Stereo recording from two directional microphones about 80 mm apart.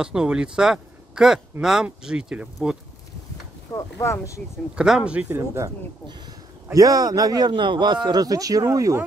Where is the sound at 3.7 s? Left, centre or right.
Left.